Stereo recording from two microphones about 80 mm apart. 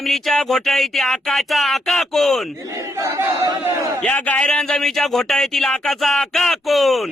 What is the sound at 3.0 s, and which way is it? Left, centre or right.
Speech, right.